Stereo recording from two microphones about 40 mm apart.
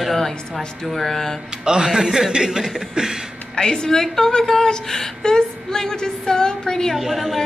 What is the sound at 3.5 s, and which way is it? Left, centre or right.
A woman's voice, centre.